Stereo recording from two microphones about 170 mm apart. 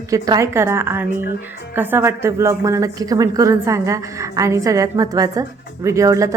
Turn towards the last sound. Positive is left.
turn(degrees=-20)  # may be behind; listen again after turning